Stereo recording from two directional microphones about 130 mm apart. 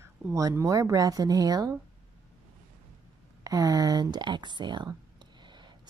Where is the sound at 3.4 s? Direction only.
30° right (ahead or behind).